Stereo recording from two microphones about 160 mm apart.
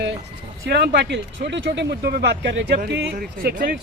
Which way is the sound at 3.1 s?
65° right (ahead or behind).